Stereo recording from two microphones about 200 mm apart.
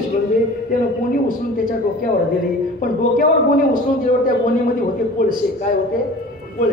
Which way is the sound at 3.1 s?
45° left (ahead or behind).